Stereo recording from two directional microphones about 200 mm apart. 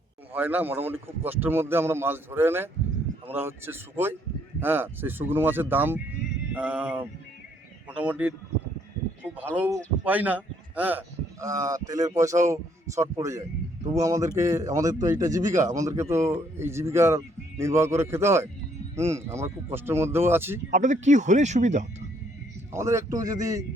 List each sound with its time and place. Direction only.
0.3 s a man's voice: 10° right (ahead or behind)
9.3 s a man's voice: 10° right (ahead or behind)
20.7 s speech: 35° right (ahead or behind)
22.7 s a man's voice: 15° right (ahead or behind)